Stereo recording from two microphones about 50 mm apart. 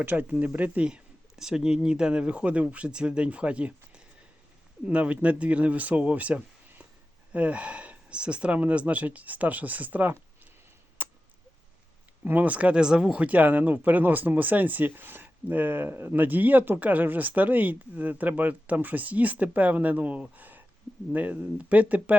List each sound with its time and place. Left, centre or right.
0.0 s speech: right
1.4 s speech: centre; by 10.2 s right
11.0 s a sound: right
12.2 s speech: right
12.8 s speech: centre
13.2 s speech: right
20.3 s a sound: right
21.1 s speech: right